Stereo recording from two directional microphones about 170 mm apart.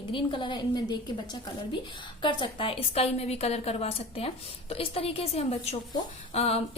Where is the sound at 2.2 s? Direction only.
30° left (ahead or behind).